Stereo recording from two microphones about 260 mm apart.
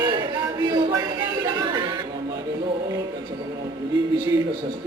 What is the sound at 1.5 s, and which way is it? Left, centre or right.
Music, centre.